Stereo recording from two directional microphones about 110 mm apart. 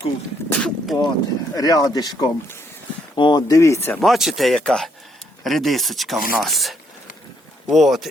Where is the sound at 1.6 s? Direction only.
35° left (ahead or behind).